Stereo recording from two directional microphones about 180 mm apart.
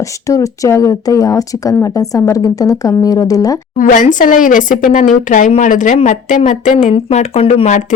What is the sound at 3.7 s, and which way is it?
Speech, 45° left (ahead or behind).